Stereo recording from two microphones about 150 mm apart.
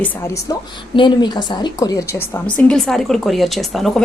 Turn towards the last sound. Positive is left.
turn(degrees=0)  # may be behind; listen again after turning